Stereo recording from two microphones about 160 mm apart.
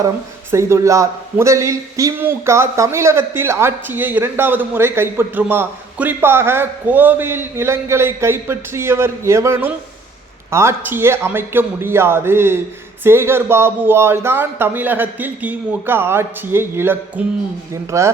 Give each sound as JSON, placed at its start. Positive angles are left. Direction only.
{"t": 0.5, "sound": "a man's voice", "side_deg": -20}